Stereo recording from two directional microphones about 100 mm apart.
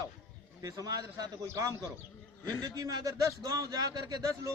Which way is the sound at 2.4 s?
35° right (ahead or behind).